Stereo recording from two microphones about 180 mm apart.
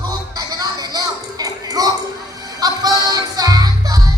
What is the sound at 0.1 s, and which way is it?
Music, 20° right (ahead or behind).